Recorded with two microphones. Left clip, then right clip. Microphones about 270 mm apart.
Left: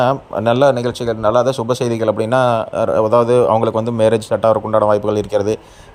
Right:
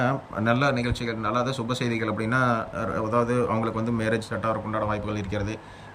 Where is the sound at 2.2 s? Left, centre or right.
Centre.